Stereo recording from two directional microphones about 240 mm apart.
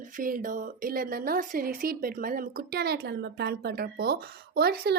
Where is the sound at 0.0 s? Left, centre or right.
Right.